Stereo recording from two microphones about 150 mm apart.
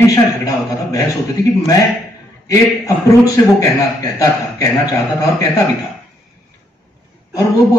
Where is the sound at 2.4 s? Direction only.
20° left (ahead or behind).